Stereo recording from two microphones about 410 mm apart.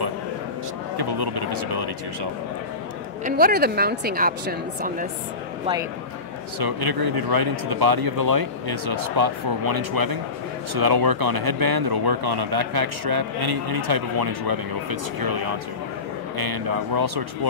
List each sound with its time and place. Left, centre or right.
0.9 s speech: right
3.3 s speech: right
6.6 s speech: right
16.3 s speech: right